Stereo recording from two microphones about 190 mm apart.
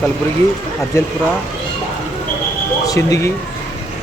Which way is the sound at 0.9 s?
15° left (ahead or behind).